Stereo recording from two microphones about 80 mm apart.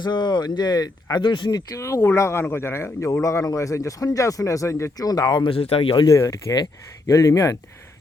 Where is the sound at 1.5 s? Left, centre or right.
Left.